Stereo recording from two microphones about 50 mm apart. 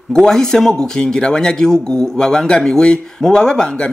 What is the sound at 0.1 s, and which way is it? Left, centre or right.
A man's voice, centre.